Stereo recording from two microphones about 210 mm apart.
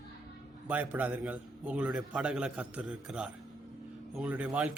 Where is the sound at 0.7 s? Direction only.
10° right (ahead or behind).